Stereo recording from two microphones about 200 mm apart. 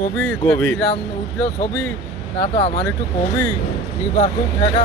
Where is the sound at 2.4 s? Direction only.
30° left (ahead or behind).